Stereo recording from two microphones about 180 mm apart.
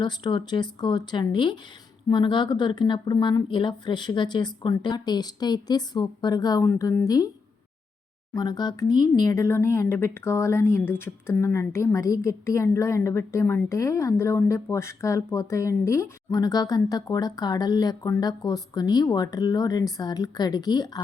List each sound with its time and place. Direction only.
0.0 s speech: 25° left (ahead or behind)
8.3 s speech: 20° left (ahead or behind)